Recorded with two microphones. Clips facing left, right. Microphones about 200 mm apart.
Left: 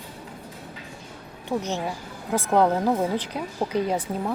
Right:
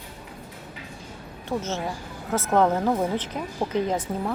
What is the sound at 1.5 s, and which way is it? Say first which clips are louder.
Speech: left 1 dB; 15° left (ahead or behind).